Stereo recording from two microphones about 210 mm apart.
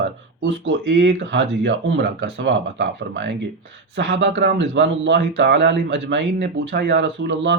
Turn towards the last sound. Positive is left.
turn(degrees=-60)  # may be behind; listen again after turning